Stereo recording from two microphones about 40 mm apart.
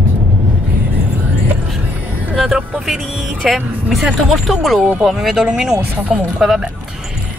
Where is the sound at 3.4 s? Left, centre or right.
Centre.